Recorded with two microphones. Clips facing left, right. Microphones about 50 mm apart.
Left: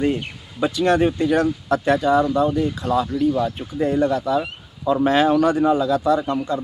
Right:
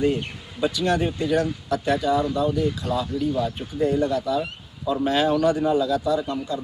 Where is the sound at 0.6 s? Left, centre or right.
Left.